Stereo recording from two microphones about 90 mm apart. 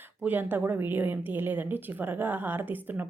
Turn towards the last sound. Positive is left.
turn(degrees=-20)  # may be behind; listen again after turning